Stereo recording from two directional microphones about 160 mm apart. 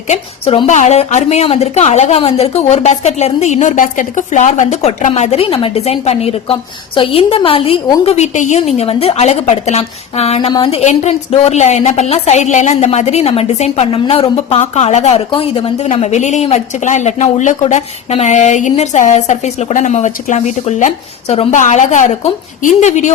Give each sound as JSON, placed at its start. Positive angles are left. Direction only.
{"t": 0.1, "sound": "a woman's voice", "side_deg": 35}
{"t": 0.7, "sound": "a woman's voice", "side_deg": 45}